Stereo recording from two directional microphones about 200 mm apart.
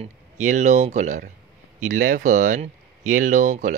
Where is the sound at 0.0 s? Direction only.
35° right (ahead or behind).